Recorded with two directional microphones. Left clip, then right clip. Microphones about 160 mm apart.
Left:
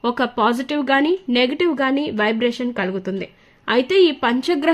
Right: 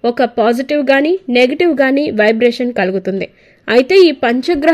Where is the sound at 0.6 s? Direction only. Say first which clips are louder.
Right 6 dB; 15° right (ahead or behind).